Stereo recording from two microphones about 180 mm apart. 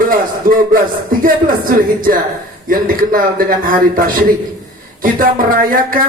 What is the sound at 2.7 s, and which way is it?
A man's voice, 50° right (ahead or behind).